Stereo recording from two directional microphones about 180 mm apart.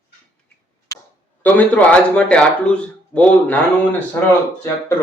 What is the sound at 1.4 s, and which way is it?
A man's voice, 10° left (ahead or behind).